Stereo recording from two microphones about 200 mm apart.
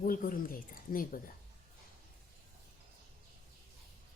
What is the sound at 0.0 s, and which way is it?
Speech, 45° left (ahead or behind).